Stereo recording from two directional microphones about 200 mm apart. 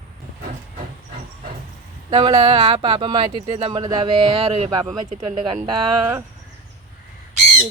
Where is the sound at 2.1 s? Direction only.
25° right (ahead or behind).